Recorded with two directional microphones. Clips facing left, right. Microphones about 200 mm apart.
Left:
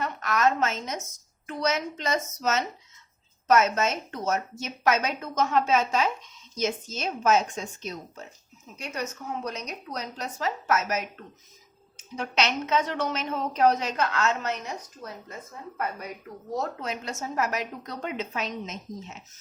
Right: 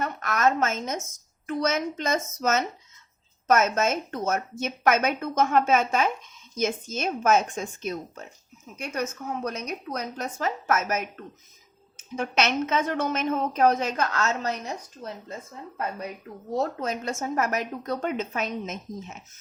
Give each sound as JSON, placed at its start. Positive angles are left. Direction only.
{"t": 0.0, "sound": "a sound", "side_deg": -50}
{"t": 1.5, "sound": "a woman's voice", "side_deg": -50}
{"t": 15.0, "sound": "speech", "side_deg": -25}
{"t": 16.8, "sound": "a woman's voice", "side_deg": -45}